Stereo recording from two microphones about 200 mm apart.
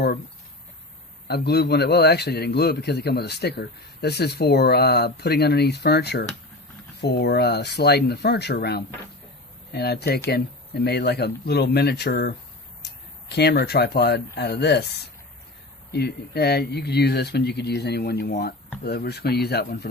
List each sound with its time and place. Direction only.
1.3 s a man's voice: 55° left (ahead or behind)